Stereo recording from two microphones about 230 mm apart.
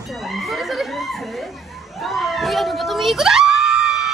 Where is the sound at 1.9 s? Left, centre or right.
Centre.